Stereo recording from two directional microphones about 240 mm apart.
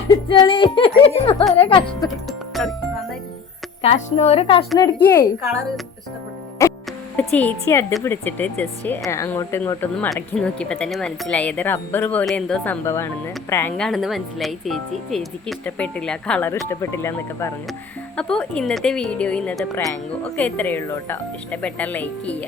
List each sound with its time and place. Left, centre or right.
0.3 s music: left
2.5 s speech: centre
3.8 s music: left
4.8 s speech: centre
6.6 s speech: centre